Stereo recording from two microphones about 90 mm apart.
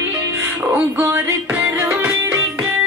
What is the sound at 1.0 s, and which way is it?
Music, 30° right (ahead or behind).